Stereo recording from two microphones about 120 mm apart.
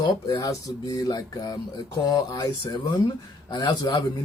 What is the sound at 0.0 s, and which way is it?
Speech, 30° left (ahead or behind).